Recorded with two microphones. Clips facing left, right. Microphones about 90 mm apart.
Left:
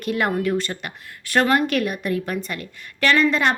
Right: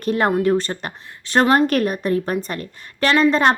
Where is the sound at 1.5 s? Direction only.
40° right (ahead or behind).